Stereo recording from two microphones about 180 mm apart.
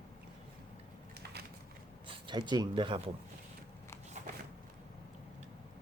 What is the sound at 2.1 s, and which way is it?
Speech, 25° right (ahead or behind).